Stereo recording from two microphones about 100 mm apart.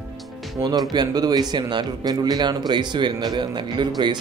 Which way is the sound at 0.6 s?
40° right (ahead or behind).